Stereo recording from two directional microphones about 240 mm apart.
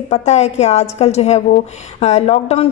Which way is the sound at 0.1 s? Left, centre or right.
Left.